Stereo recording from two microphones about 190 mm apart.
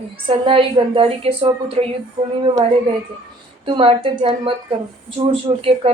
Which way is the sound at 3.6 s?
25° right (ahead or behind).